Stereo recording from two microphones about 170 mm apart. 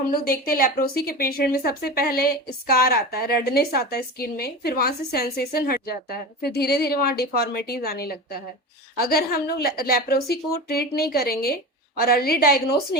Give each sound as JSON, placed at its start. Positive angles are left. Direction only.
{"t": 0.1, "sound": "speech", "side_deg": 60}